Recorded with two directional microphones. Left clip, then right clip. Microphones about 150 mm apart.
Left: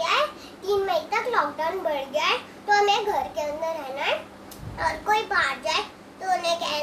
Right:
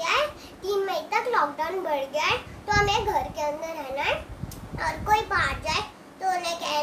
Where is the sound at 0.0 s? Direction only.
20° right (ahead or behind).